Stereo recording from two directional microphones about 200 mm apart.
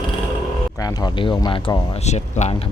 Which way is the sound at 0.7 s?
20° left (ahead or behind).